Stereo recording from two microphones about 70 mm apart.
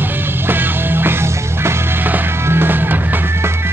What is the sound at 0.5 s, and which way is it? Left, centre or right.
Music, right.